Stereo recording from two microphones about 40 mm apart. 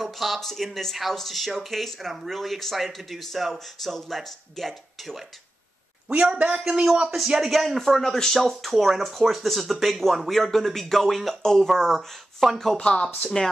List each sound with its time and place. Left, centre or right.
0.0 s a sound: centre
0.4 s speech: centre
6.3 s speech: centre
12.7 s speech: left